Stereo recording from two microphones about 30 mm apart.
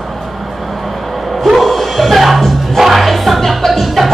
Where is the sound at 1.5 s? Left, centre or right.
Centre.